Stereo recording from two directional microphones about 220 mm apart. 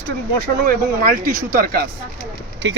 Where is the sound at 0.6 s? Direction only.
40° right (ahead or behind).